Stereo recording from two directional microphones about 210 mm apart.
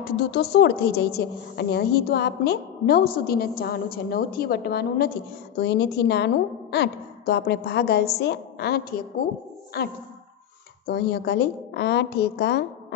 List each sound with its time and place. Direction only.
0.2 s a woman's voice: 50° left (ahead or behind)